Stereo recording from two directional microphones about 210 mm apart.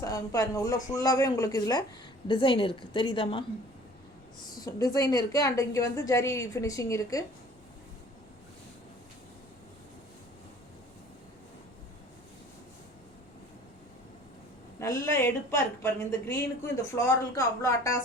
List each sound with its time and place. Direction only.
0.0 s a woman's voice: 15° left (ahead or behind)
4.4 s speech: 15° left (ahead or behind)
14.8 s speech: 10° left (ahead or behind)